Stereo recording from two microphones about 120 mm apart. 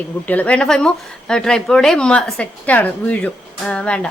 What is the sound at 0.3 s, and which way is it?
Speech, 10° left (ahead or behind).